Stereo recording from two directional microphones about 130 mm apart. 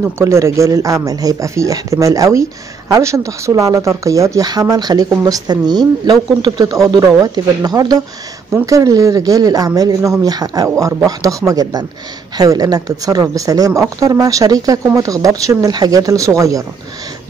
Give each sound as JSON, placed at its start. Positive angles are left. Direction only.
{"t": 0.0, "sound": "speech", "side_deg": -20}